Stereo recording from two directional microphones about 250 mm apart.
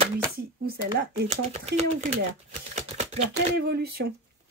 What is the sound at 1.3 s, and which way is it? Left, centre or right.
Speech, right.